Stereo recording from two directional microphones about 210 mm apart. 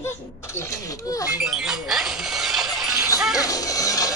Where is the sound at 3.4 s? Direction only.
15° left (ahead or behind).